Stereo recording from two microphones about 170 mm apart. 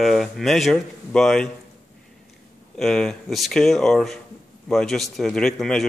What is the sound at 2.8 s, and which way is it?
Speech, 5° left (ahead or behind).